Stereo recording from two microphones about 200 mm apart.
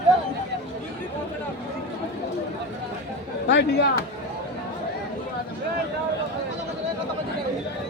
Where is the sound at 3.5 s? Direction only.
60° left (ahead or behind).